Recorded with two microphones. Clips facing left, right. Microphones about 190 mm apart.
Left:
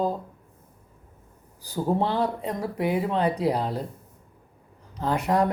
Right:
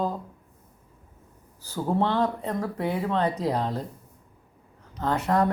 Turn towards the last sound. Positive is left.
turn(degrees=15)  # may be behind; listen again after turning